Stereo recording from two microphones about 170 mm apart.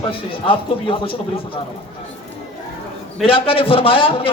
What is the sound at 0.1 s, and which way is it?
A man's voice, 30° left (ahead or behind).